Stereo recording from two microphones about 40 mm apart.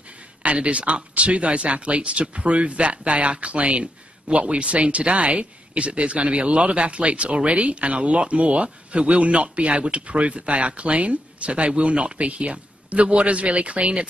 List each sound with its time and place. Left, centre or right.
0.4 s speech: right